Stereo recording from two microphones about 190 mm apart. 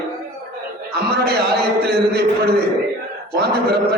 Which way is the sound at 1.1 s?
55° right (ahead or behind).